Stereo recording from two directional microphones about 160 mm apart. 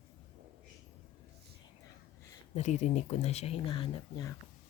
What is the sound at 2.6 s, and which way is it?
Speech, 45° left (ahead or behind).